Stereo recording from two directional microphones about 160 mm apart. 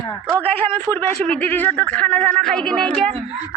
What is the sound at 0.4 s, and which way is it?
A man's voice, 10° left (ahead or behind).